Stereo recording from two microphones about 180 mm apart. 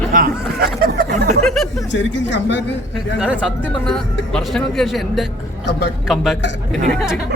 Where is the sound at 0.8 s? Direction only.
55° right (ahead or behind).